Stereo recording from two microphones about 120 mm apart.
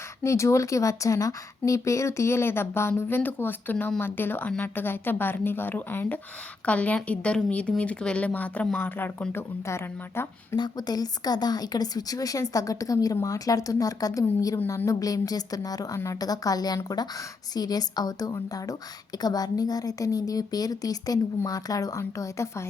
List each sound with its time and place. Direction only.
0.2 s a woman's voice: 25° left (ahead or behind)
10.5 s a woman's voice: 35° left (ahead or behind)